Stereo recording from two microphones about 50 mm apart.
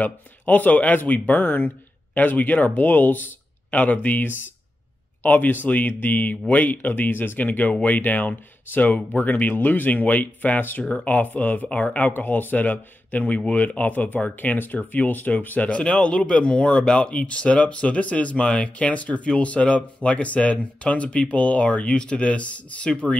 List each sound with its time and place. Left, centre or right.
0.0 s speech: left